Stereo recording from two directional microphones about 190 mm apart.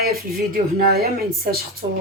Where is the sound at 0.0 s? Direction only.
50° right (ahead or behind).